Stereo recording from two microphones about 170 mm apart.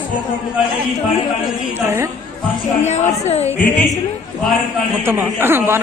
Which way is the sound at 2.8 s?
40° left (ahead or behind).